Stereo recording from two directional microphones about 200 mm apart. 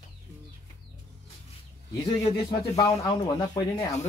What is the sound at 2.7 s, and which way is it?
Speech, 15° left (ahead or behind).